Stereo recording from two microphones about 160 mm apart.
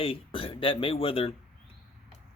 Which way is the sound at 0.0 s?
35° left (ahead or behind).